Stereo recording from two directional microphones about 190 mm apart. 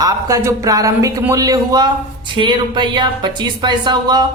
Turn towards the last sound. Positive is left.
turn(degrees=-20)  # may be behind; listen again after turning